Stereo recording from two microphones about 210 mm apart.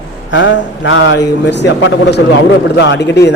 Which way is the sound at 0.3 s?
60° left (ahead or behind).